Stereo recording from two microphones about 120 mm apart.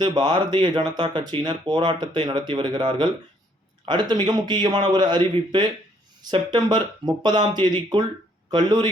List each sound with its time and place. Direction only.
0.0 s speech: 40° right (ahead or behind)